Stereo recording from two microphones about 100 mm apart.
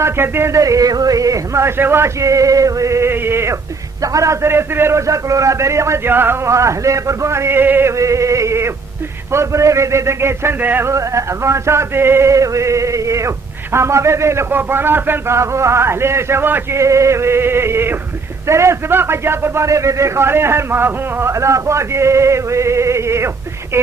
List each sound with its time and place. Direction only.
0.0 s a man's voice: 25° right (ahead or behind)